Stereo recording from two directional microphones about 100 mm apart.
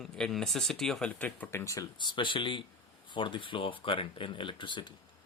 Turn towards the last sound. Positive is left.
turn(degrees=50)  # may be behind; listen again after turning